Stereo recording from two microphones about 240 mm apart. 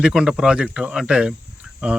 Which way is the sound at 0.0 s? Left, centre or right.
Centre.